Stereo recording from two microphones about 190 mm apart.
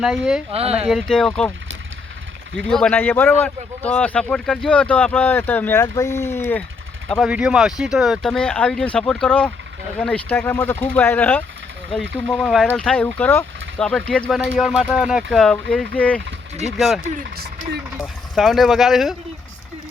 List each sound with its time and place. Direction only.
0.0 s speech: 5° right (ahead or behind)
0.5 s speech: 30° right (ahead or behind)
0.9 s speech: centre (ahead or behind)
2.6 s speech: 5° left (ahead or behind)
7.1 s speech: centre (ahead or behind)
17.2 s speech: 55° right (ahead or behind)
17.9 s speech: centre (ahead or behind)